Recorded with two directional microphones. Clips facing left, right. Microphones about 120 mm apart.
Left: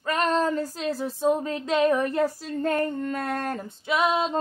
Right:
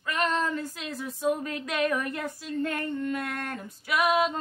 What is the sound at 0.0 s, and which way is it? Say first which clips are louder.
Speech: left 4 dB; 35° left (ahead or behind).